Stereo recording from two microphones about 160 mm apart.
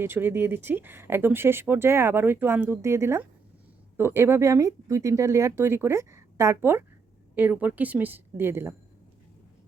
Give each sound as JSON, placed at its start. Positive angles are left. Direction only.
{"t": 0.0, "sound": "speech", "side_deg": -15}